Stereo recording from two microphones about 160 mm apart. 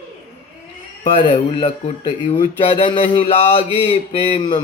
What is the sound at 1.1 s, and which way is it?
A man's voice, 35° left (ahead or behind).